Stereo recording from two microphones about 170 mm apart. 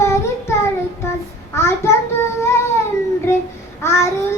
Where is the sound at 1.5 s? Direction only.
15° left (ahead or behind).